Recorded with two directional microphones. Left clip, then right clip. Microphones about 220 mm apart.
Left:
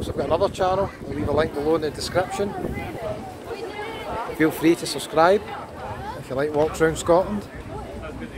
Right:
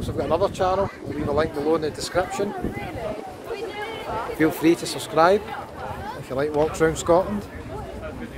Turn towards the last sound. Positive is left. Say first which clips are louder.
# even
turn(degrees=5)  # may be behind; listen again after turning